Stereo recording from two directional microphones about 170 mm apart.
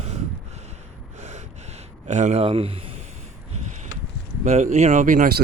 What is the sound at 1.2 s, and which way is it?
Gasp, 40° right (ahead or behind).